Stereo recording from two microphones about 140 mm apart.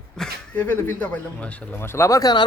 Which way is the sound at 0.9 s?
10° left (ahead or behind).